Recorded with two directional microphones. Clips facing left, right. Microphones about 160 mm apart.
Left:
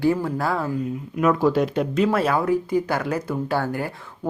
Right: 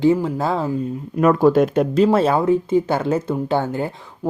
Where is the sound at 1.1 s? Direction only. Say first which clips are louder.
Right 5 dB; 45° right (ahead or behind).